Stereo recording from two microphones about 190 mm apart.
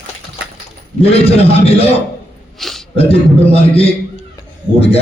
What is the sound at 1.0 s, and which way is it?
Speech, 30° left (ahead or behind).